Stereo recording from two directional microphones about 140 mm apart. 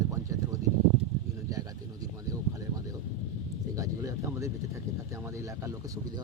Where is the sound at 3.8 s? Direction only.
25° right (ahead or behind).